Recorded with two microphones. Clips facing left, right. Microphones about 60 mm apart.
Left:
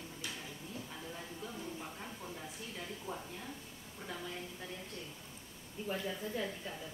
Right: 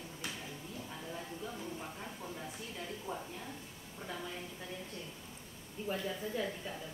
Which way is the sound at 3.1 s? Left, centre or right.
Centre.